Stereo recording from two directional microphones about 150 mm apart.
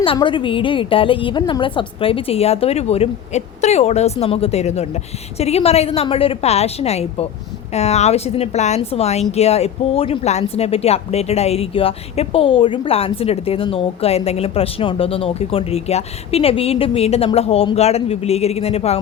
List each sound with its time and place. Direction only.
0.0 s a woman's voice: 35° left (ahead or behind)